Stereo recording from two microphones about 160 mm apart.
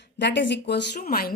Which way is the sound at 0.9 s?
65° left (ahead or behind).